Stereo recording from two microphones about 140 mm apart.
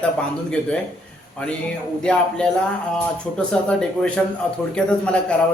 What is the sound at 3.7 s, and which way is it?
A man's voice, 5° left (ahead or behind).